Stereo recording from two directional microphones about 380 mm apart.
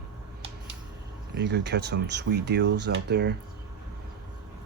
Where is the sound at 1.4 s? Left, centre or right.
Right.